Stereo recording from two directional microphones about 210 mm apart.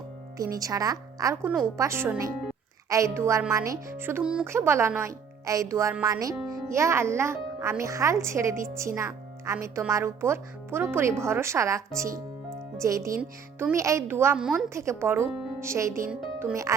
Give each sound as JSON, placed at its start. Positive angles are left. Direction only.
{"t": 0.5, "sound": "speech", "side_deg": -15}
{"t": 13.6, "sound": "speech", "side_deg": -10}